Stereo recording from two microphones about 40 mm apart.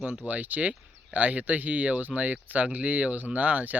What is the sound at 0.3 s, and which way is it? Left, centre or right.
Speech, right.